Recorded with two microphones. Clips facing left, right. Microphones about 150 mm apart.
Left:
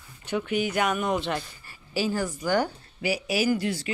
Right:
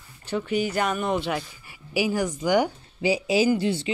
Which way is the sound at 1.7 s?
15° right (ahead or behind).